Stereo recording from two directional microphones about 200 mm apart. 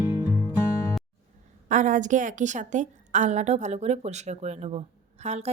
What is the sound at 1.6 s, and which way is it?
Speech, 40° right (ahead or behind).